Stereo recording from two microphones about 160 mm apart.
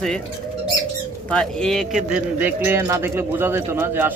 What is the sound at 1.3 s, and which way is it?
Speech, 5° left (ahead or behind).